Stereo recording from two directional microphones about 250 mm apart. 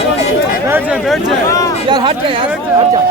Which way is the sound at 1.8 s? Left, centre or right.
Centre.